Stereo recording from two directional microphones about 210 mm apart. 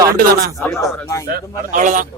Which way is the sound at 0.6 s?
Centre (ahead or behind).